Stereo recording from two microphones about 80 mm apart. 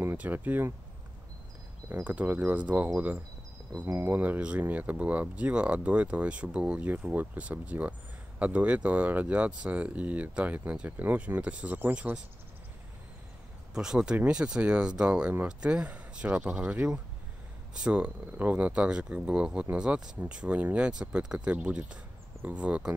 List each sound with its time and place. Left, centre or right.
0.2 s speech: right
2.0 s speech: centre
3.8 s speech: right
4.2 s speech: centre
13.7 s speech: centre